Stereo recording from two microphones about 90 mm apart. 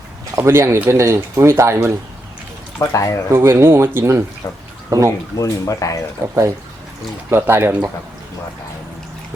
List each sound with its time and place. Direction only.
0.3 s speech: 30° right (ahead or behind)
2.9 s speech: 35° left (ahead or behind)
3.3 s speech: 25° right (ahead or behind)
4.4 s speech: 30° left (ahead or behind)
4.9 s speech: 40° right (ahead or behind)
5.4 s speech: 40° left (ahead or behind)
6.2 s speech: 35° right (ahead or behind)